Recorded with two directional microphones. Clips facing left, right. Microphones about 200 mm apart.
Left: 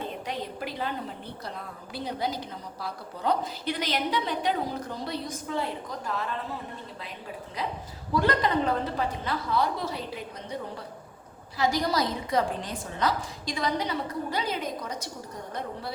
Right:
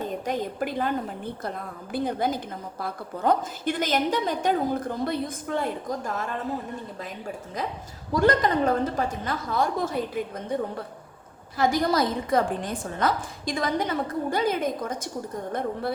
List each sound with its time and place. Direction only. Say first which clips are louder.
0.0 s a woman's voice: right 5 dB; 45° right (ahead or behind)